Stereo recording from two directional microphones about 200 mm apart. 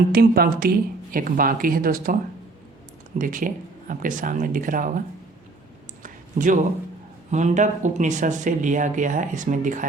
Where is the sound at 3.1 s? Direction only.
40° right (ahead or behind).